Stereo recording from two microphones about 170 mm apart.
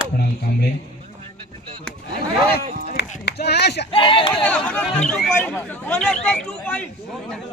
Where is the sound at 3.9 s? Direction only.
30° left (ahead or behind).